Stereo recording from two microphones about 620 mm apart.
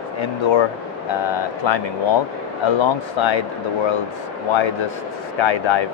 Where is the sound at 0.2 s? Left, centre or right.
Left.